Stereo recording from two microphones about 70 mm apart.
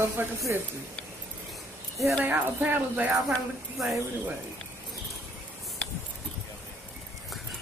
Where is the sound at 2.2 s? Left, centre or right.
Right.